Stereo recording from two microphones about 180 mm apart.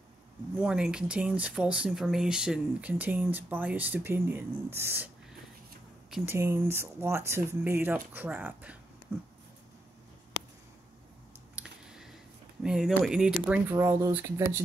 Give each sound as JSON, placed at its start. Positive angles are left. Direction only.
{"t": 0.6, "sound": "speech", "side_deg": -5}
{"t": 6.0, "sound": "a sound", "side_deg": 0}
{"t": 6.3, "sound": "speech", "side_deg": -15}
{"t": 11.5, "sound": "a sound", "side_deg": -5}
{"t": 12.6, "sound": "speech", "side_deg": -5}
{"t": 13.7, "sound": "speech", "side_deg": -15}